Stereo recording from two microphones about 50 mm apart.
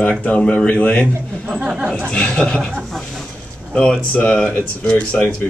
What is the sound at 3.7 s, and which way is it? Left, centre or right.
Speech, left.